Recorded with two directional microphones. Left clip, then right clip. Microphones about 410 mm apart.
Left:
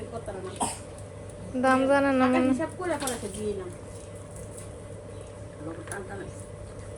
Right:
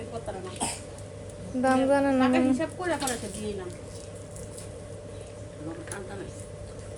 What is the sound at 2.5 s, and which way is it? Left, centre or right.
Speech, centre.